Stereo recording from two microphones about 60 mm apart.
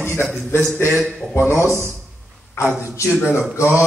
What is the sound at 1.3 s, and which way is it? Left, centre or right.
Speech, right.